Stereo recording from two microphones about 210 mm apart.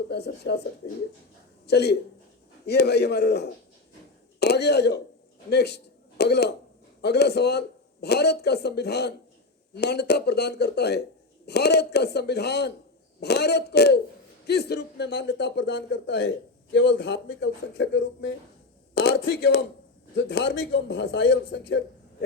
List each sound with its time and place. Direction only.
0.1 s speech: 50° left (ahead or behind)
1.6 s a man's voice: 50° left (ahead or behind)